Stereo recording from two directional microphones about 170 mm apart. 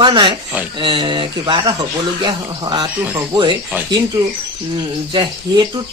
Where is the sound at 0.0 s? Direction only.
30° right (ahead or behind).